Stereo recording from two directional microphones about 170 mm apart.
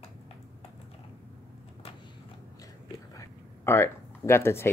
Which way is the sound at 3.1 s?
15° left (ahead or behind).